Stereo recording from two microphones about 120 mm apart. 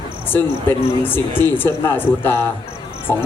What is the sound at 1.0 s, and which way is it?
Speech, 15° left (ahead or behind).